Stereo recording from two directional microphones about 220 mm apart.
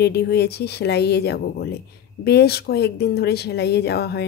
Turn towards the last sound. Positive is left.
turn(degrees=50)  # may be behind; listen again after turning